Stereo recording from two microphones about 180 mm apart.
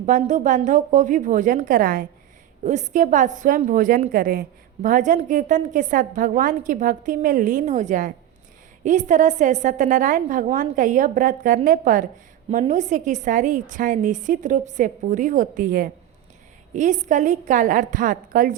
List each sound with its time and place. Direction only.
0.0 s a woman's voice: 40° right (ahead or behind)